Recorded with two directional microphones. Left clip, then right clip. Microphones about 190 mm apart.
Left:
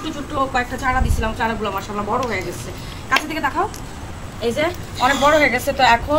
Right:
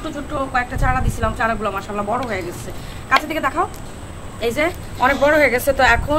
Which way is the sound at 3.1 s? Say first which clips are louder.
Right 2 dB; 30° right (ahead or behind).